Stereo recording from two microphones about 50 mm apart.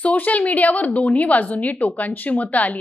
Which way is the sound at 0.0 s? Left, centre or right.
Left.